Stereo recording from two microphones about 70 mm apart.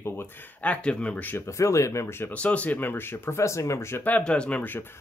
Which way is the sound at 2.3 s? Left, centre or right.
Centre.